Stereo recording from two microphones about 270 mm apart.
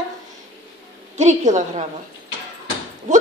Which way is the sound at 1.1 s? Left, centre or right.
Right.